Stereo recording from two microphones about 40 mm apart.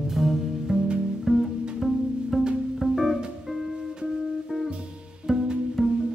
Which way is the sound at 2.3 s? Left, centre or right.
Centre.